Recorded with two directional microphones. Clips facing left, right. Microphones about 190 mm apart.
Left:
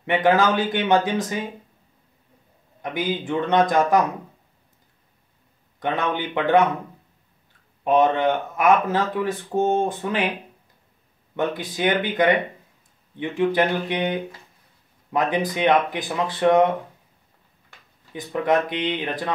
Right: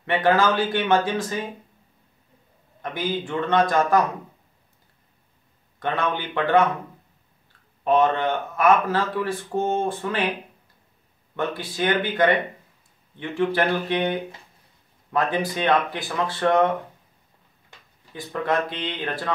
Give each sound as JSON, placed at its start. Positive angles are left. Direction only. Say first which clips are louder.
{"t": 0.0, "sound": "speech", "louder": "left 1 dB", "side_deg": 15}
{"t": 2.8, "sound": "speech", "louder": "left 1 dB", "side_deg": 15}
{"t": 5.8, "sound": "speech", "louder": "left 1 dB", "side_deg": 15}
{"t": 7.8, "sound": "speech", "louder": "left 2 dB", "side_deg": 15}
{"t": 11.3, "sound": "speech", "louder": "left 2 dB", "side_deg": 15}
{"t": 18.1, "sound": "speech", "louder": "left 3 dB", "side_deg": 15}